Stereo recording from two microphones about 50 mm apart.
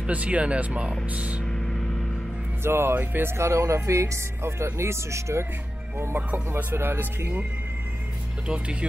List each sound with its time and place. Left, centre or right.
0.0 s speech: right
1.4 s vehicle: centre
2.6 s speech: right
3.0 s speech: right
3.3 s speech: right
6.5 s speech: right